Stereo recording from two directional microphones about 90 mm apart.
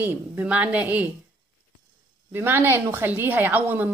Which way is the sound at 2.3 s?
25° right (ahead or behind).